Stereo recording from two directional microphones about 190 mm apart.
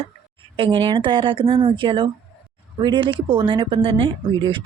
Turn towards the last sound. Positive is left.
turn(degrees=-25)  # may be behind; listen again after turning